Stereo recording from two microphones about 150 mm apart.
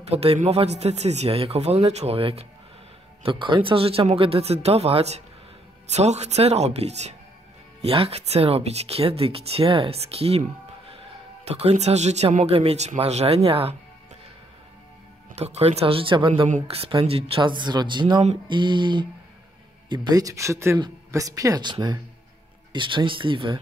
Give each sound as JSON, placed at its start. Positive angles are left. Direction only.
{"t": 0.0, "sound": "speech", "side_deg": -40}
{"t": 11.6, "sound": "speech", "side_deg": -45}
{"t": 15.3, "sound": "speech", "side_deg": -45}
{"t": 16.4, "sound": "speech", "side_deg": -50}